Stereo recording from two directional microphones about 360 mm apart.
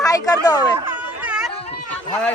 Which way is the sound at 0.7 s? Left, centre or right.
Centre.